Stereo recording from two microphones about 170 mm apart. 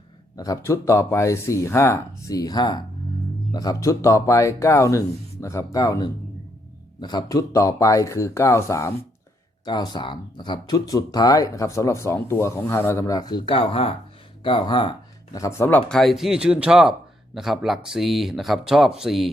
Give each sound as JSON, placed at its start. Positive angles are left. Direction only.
{"t": 0.3, "sound": "speech", "side_deg": 20}